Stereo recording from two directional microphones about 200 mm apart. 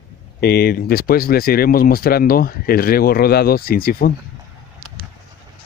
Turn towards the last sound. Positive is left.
turn(degrees=50)  # may be behind; listen again after turning